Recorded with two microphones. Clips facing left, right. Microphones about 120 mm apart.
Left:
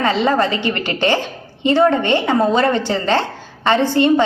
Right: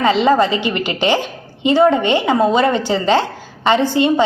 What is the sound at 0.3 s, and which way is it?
A woman's voice, 15° right (ahead or behind).